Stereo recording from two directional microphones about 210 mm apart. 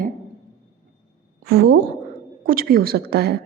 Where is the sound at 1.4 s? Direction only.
50° right (ahead or behind).